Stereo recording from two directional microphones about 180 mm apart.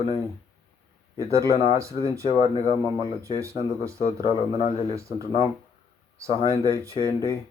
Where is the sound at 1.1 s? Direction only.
15° right (ahead or behind).